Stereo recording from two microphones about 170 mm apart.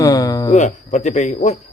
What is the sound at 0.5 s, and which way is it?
Speech, 45° left (ahead or behind).